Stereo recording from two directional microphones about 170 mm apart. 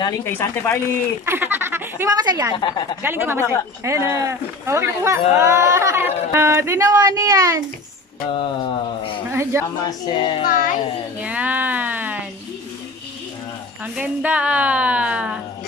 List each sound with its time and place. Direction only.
0.2 s speech: 15° left (ahead or behind)
1.2 s a woman's voice: 15° right (ahead or behind)
2.5 s speech: 25° left (ahead or behind)
3.0 s speech: 15° right (ahead or behind)
8.4 s a sound: 30° left (ahead or behind)
9.3 s speech: 15° right (ahead or behind)
9.8 s speech: 25° left (ahead or behind)
10.5 s speech: 50° left (ahead or behind)
11.1 s a sound: 10° right (ahead or behind)
13.9 s speech: 10° right (ahead or behind)